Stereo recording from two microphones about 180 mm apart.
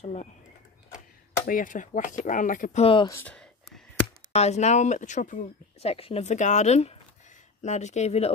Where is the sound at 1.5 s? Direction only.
50° left (ahead or behind).